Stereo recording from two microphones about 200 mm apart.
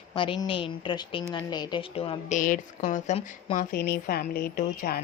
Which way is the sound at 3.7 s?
50° left (ahead or behind).